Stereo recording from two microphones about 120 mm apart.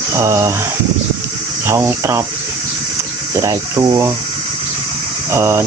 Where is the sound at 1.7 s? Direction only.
20° right (ahead or behind).